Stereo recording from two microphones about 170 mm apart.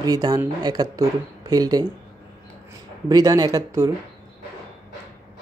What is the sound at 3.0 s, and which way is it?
Speech, 20° right (ahead or behind).